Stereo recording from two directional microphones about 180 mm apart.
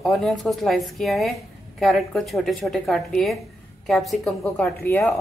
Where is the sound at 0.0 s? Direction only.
5° left (ahead or behind).